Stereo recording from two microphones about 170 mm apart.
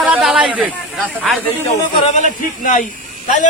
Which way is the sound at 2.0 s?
45° left (ahead or behind).